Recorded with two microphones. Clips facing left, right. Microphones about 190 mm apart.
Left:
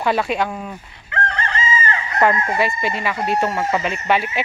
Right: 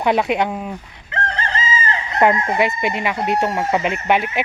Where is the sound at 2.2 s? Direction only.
20° right (ahead or behind).